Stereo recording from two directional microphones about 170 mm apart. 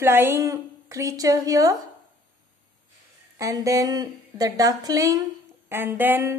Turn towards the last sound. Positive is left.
turn(degrees=-15)  # may be behind; listen again after turning